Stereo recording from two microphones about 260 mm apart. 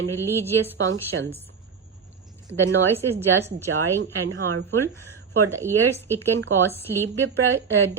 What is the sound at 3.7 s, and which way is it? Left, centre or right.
Speech, right.